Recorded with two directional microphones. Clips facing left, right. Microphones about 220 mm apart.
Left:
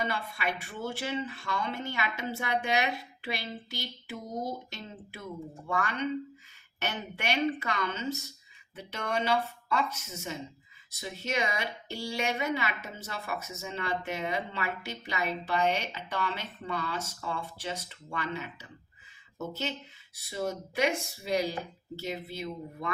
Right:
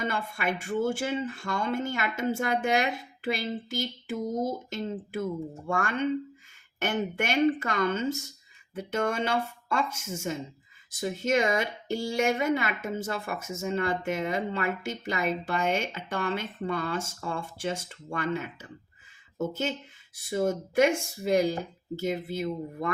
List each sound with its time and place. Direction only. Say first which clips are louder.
0.0 s speech: right 3 dB; 50° right (ahead or behind)